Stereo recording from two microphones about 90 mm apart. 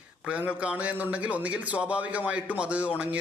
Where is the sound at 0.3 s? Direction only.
15° right (ahead or behind).